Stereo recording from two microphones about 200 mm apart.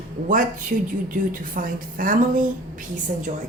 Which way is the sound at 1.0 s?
45° right (ahead or behind).